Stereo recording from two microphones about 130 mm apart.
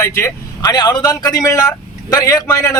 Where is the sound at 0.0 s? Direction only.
20° left (ahead or behind).